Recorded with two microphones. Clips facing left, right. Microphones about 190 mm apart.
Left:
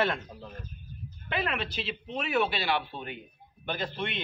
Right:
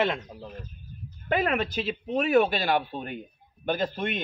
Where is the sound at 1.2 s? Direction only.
45° right (ahead or behind).